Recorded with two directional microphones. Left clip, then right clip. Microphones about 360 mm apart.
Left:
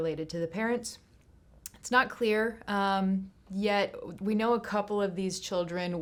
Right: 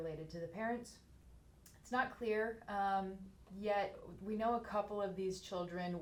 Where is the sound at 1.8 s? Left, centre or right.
Left.